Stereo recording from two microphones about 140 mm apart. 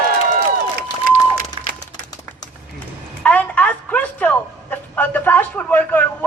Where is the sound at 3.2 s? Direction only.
10° left (ahead or behind).